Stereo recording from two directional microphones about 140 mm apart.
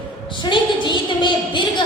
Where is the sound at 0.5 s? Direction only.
35° left (ahead or behind).